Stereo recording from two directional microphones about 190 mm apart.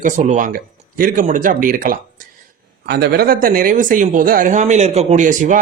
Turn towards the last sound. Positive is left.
turn(degrees=-40)  # may be behind; listen again after turning